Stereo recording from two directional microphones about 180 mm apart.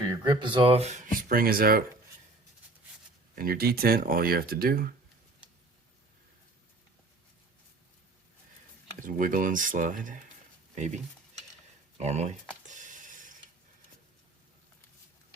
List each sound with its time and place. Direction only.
0.0 s speech: 20° right (ahead or behind); by 1.8 s 55° right (ahead or behind)
3.3 s speech: 55° right (ahead or behind)
9.0 s speech: 50° right (ahead or behind)
12.6 s a sound: 45° right (ahead or behind)